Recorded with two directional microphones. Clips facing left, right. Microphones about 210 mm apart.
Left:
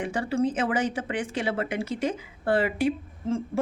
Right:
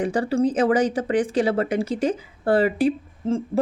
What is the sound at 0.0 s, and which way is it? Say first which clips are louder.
Speech: right 5 dB; 35° right (ahead or behind).